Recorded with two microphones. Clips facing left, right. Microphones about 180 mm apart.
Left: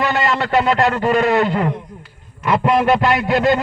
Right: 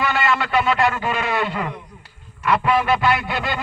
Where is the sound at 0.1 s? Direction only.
40° left (ahead or behind).